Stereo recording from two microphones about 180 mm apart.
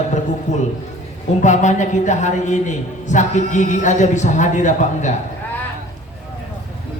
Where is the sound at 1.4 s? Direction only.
40° left (ahead or behind).